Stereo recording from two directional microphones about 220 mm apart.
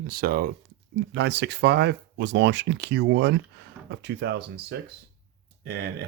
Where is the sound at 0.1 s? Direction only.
45° right (ahead or behind).